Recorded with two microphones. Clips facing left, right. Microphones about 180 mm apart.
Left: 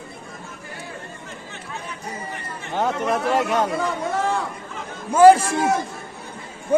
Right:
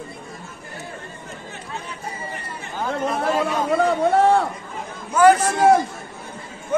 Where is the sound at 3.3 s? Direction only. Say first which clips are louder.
Left 1 dB; 75° left (ahead or behind).